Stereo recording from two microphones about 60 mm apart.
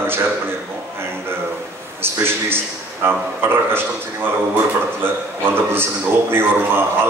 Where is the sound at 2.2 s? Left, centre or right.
Right.